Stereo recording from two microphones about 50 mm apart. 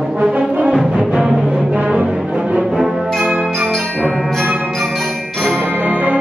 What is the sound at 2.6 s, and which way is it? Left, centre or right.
Music, centre.